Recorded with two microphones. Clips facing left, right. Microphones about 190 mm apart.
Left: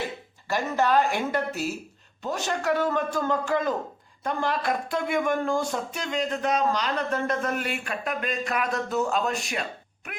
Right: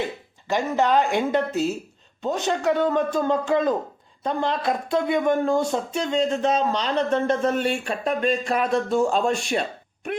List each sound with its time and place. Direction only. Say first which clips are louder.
0.4 s speech: right 3 dB; 20° right (ahead or behind)